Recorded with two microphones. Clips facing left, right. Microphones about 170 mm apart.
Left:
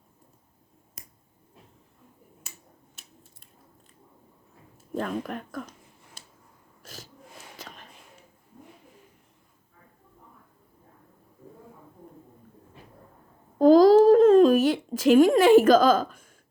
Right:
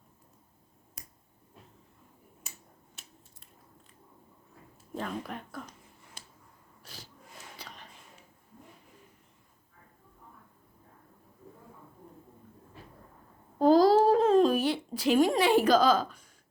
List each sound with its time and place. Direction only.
4.9 s speech: 55° left (ahead or behind)
6.8 s a sound: 45° left (ahead or behind)
13.6 s babbling: 45° left (ahead or behind)